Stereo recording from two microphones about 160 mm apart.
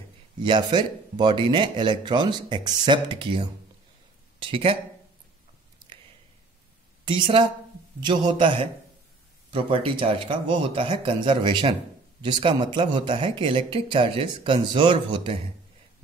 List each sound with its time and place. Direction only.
0.4 s speech: 30° right (ahead or behind)
7.1 s speech: 30° right (ahead or behind)